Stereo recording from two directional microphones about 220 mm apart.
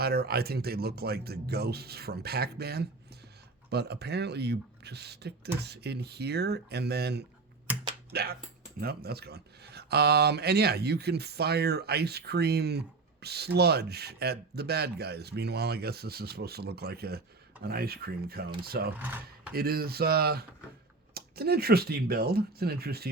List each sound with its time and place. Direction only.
0.0 s speech: 45° right (ahead or behind)